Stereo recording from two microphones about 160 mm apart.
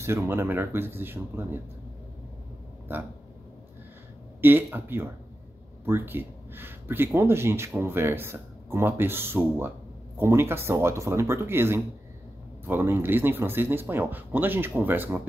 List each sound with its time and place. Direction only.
0.0 s speech: 15° right (ahead or behind)
4.4 s speech: 10° right (ahead or behind)